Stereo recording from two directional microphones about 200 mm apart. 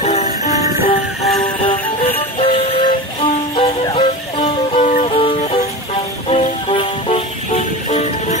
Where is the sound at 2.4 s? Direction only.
25° left (ahead or behind).